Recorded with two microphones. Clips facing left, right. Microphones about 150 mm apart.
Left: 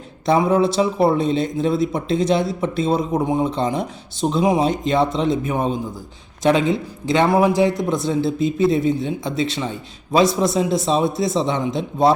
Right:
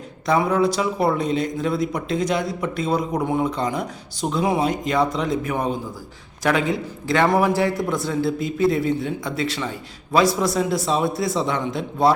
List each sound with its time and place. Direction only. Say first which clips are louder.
0.3 s a man's voice: left 3 dB; 25° left (ahead or behind)